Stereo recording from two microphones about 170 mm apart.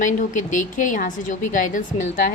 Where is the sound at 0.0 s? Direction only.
50° left (ahead or behind).